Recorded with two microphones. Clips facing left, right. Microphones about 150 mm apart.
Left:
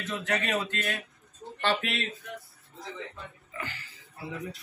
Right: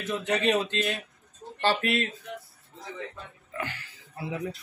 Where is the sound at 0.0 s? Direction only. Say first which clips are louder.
Right 5 dB; 20° right (ahead or behind).